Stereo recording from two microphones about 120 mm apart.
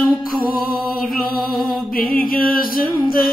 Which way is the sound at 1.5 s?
Centre (ahead or behind).